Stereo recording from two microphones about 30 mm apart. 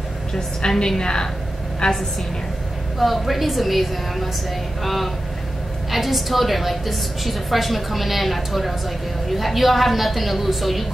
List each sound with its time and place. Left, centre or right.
0.3 s a woman's voice: left
3.0 s a woman's voice: centre